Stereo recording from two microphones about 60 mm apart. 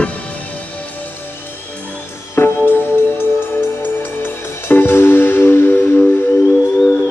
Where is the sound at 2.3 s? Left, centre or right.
Left.